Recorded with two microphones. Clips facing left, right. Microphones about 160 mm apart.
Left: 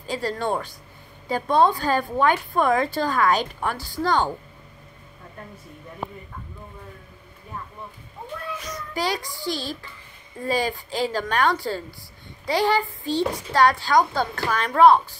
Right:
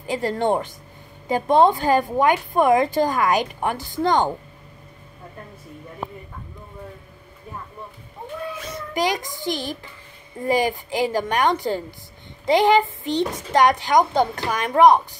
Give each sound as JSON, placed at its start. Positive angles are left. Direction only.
{"t": 0.0, "sound": "a woman's voice", "side_deg": -20}
{"t": 8.6, "sound": "a child's voice", "side_deg": -20}